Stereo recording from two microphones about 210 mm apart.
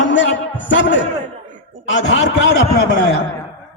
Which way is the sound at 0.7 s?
60° left (ahead or behind).